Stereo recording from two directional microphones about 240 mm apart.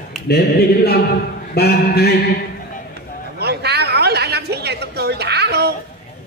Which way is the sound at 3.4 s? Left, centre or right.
Right.